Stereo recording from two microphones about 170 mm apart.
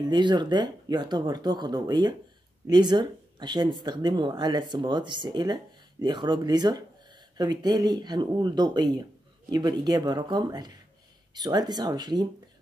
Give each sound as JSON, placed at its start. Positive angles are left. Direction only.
{"t": 0.0, "sound": "speech", "side_deg": -25}